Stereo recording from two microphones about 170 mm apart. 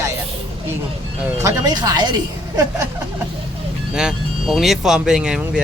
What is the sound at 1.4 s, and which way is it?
Speech, 25° right (ahead or behind).